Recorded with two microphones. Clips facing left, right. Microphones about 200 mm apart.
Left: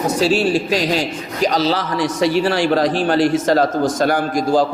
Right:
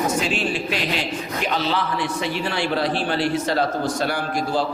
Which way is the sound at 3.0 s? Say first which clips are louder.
Left 7 dB; 45° left (ahead or behind).